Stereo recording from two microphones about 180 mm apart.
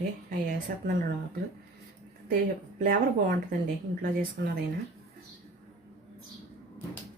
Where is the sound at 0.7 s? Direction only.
50° right (ahead or behind).